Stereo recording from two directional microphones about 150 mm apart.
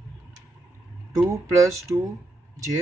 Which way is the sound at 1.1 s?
20° right (ahead or behind).